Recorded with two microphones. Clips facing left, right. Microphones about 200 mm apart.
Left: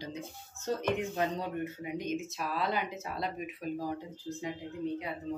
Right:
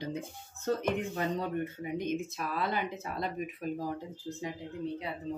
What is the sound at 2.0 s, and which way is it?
Speech, 55° right (ahead or behind).